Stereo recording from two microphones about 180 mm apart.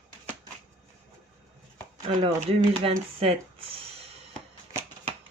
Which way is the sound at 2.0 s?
30° right (ahead or behind).